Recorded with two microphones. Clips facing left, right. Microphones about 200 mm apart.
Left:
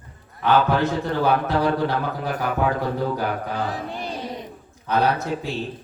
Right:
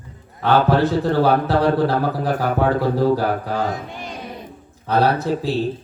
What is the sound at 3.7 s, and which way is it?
Music, 35° left (ahead or behind).